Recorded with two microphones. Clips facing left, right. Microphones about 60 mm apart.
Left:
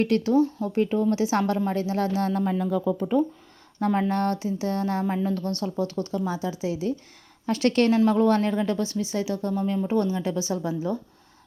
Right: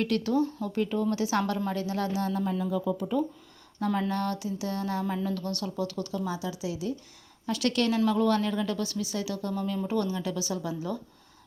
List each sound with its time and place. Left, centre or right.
0.0 s a woman's voice: left
2.8 s a woman's voice: left